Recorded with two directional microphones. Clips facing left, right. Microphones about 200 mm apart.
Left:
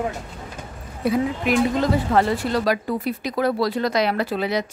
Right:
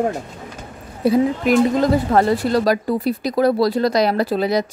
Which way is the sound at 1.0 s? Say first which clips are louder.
Right 5 dB; 35° right (ahead or behind).